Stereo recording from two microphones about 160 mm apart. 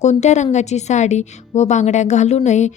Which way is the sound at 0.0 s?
45° left (ahead or behind).